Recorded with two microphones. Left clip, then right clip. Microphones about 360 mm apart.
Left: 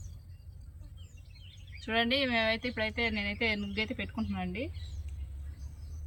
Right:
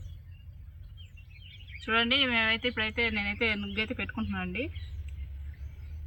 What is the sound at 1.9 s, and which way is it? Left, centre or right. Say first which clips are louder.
Speech: right 3 dB; centre.